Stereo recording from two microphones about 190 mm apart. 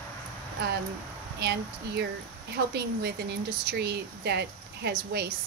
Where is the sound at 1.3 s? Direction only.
60° right (ahead or behind).